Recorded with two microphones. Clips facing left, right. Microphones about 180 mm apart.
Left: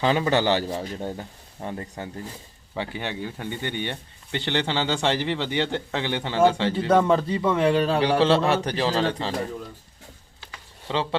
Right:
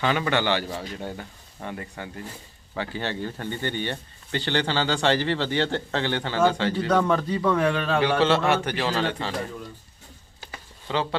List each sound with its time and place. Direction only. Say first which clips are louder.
0.0 s a man's voice: left 3 dB; 30° left (ahead or behind)
7.7 s a man's voice: left 2 dB; 35° left (ahead or behind)
10.8 s speech: left 1 dB; 25° left (ahead or behind)